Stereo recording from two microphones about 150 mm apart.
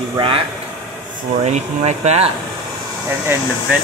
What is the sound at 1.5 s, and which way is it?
Speech, 50° right (ahead or behind).